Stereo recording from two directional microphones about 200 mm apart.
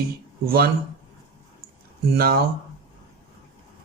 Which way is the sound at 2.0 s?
50° right (ahead or behind).